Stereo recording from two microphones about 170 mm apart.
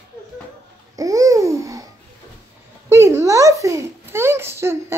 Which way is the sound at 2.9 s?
15° right (ahead or behind).